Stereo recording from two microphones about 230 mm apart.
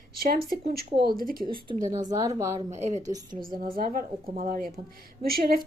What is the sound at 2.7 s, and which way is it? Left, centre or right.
A woman's voice, right.